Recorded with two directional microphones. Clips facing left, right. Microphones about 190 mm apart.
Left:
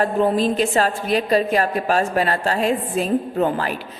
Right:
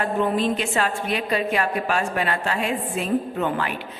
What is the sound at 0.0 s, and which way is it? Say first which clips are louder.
A woman's voice: left 4 dB; 35° left (ahead or behind).